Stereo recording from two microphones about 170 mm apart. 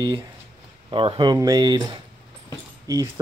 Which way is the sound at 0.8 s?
30° right (ahead or behind).